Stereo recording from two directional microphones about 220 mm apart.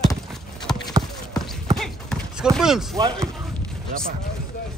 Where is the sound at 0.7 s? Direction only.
15° left (ahead or behind).